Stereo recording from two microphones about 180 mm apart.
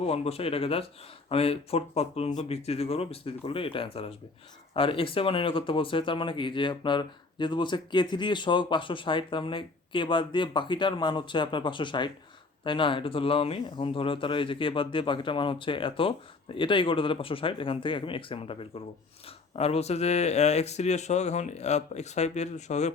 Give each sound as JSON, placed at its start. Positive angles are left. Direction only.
{"t": 0.0, "sound": "speech", "side_deg": 35}